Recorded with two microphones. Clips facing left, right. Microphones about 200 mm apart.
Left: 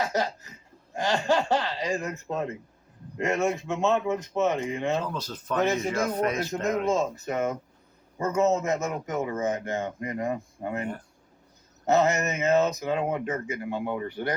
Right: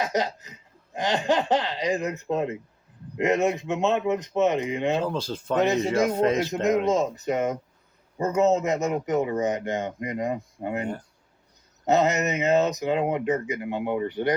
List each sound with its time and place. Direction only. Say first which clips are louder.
0.0 s laughter: right 2 dB; 20° right (ahead or behind)
0.9 s speech: right 1 dB; 20° right (ahead or behind)